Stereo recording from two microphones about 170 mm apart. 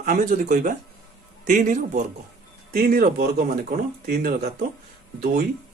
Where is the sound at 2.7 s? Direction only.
60° right (ahead or behind).